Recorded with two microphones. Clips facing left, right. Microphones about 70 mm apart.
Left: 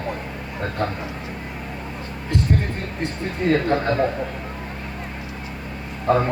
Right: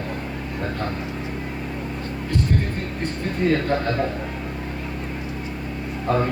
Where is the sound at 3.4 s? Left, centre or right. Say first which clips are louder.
Left 1 dB; centre.